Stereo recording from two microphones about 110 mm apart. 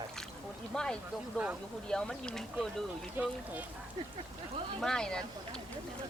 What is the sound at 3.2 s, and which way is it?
Speech, 15° right (ahead or behind).